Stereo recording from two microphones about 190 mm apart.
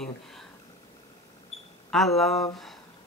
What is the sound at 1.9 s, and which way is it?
Speech, centre (ahead or behind).